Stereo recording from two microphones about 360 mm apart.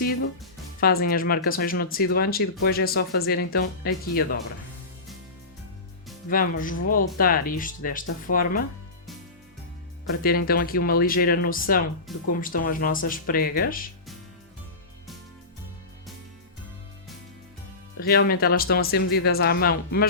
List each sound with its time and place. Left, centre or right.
0.8 s speech: left
6.3 s speech: left
10.1 s speech: left
18.0 s speech: left